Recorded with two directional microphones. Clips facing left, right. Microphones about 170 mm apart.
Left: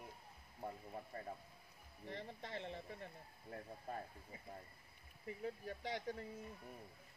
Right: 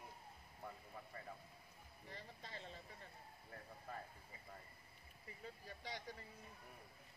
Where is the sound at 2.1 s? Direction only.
65° left (ahead or behind).